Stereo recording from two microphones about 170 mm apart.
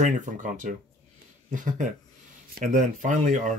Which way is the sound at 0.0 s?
50° right (ahead or behind).